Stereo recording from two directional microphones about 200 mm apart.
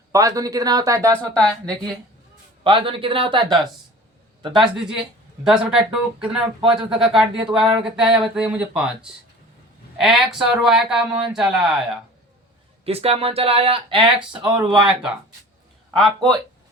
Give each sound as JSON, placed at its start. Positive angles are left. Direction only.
{"t": 0.1, "sound": "speech", "side_deg": -15}
{"t": 1.1, "sound": "speech", "side_deg": 5}
{"t": 2.6, "sound": "speech", "side_deg": -25}
{"t": 4.5, "sound": "speech", "side_deg": -5}
{"t": 12.8, "sound": "speech", "side_deg": -30}
{"t": 14.8, "sound": "speech", "side_deg": -5}